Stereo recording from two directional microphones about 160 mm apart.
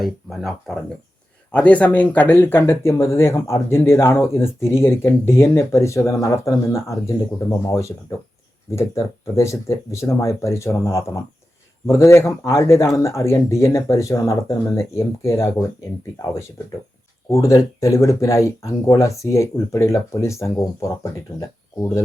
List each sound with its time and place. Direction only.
0.0 s speech: centre (ahead or behind); by 15.6 s 20° left (ahead or behind)
17.2 s speech: 20° left (ahead or behind)